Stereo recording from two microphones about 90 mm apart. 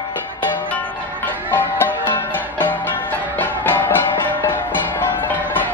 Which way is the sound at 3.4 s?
25° left (ahead or behind).